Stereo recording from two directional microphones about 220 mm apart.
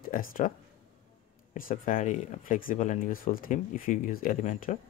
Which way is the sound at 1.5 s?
40° left (ahead or behind).